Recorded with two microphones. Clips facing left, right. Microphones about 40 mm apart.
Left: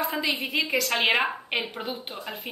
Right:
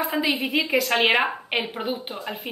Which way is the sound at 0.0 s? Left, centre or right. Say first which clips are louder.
Right 3 dB; centre.